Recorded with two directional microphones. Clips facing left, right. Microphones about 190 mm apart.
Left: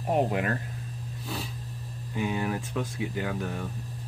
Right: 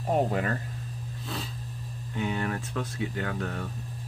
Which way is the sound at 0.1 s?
10° left (ahead or behind).